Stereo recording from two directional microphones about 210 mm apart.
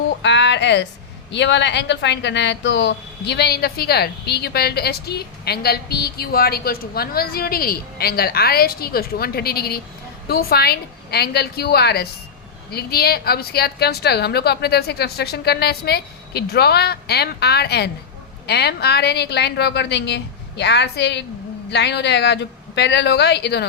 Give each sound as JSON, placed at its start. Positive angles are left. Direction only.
{"t": 0.2, "sound": "a woman's voice", "side_deg": 55}